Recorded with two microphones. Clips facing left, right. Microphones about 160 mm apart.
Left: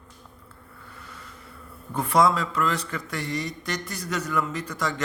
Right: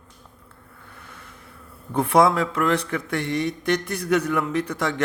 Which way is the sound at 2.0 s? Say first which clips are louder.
Right 3 dB; 60° right (ahead or behind).